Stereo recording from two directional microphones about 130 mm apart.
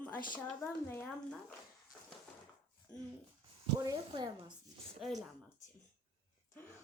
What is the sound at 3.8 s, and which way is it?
Speech, 30° right (ahead or behind).